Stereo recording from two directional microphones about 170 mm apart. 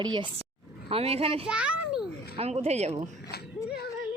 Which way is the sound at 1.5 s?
5° right (ahead or behind).